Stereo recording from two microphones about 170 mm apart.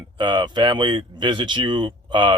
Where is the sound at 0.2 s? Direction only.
25° right (ahead or behind).